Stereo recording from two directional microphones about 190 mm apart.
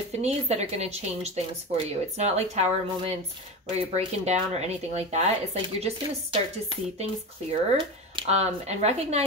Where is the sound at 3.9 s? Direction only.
35° right (ahead or behind).